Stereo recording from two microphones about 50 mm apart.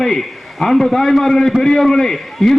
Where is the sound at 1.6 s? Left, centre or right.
Centre.